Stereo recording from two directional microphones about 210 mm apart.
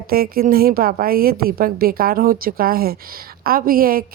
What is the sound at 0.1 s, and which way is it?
A woman's voice, 45° right (ahead or behind).